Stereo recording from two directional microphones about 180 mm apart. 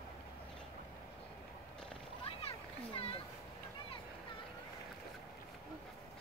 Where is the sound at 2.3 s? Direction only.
30° left (ahead or behind).